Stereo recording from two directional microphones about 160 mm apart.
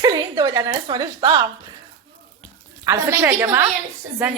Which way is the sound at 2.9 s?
15° right (ahead or behind).